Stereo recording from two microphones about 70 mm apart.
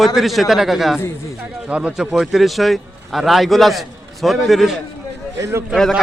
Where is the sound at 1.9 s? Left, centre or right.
Centre.